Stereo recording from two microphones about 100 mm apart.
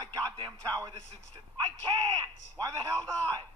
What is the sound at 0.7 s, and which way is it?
Speech, 40° right (ahead or behind).